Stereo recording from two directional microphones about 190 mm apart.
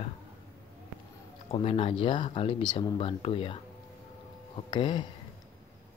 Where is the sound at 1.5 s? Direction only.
30° left (ahead or behind).